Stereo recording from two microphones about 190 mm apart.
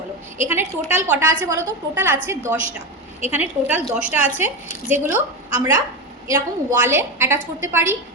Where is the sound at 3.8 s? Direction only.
5° right (ahead or behind).